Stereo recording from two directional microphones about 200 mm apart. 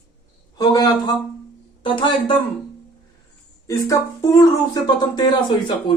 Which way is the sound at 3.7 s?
15° left (ahead or behind).